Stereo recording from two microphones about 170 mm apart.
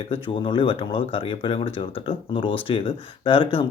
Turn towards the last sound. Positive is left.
turn(degrees=30)  # may be behind; listen again after turning